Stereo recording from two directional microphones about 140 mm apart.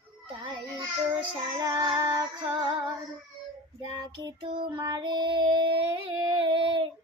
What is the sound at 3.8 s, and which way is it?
Child singing, 35° right (ahead or behind).